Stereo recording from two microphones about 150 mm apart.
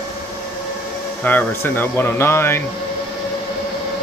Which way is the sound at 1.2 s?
10° left (ahead or behind).